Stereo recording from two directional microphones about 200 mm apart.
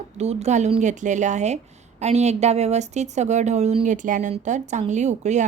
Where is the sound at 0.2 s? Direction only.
30° right (ahead or behind).